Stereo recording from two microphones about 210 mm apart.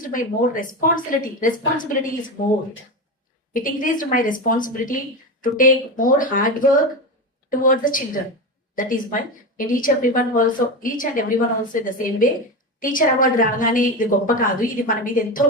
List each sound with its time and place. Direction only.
0.0 s a woman's voice: 40° left (ahead or behind)
12.8 s a woman's voice: 40° left (ahead or behind)